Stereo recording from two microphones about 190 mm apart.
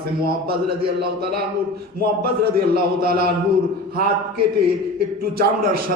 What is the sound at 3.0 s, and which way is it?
Speech, 55° right (ahead or behind).